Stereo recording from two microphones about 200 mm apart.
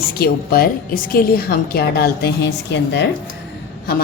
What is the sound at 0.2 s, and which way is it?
A woman's voice, 50° left (ahead or behind).